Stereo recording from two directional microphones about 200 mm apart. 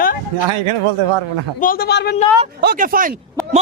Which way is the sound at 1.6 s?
45° left (ahead or behind).